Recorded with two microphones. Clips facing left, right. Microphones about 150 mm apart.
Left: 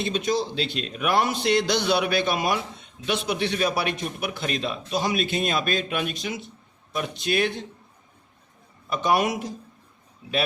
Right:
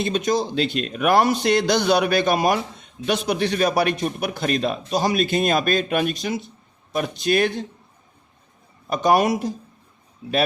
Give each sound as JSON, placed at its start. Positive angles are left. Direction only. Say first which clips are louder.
{"t": 0.0, "sound": "a man's voice", "louder": "right 3 dB", "side_deg": -45}
{"t": 8.9, "sound": "a man's voice", "louder": "right 5 dB", "side_deg": -40}